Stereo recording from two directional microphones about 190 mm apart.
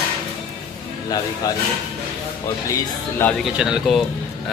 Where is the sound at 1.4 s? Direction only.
20° left (ahead or behind).